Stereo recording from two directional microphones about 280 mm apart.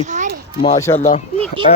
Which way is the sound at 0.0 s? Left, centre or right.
Right.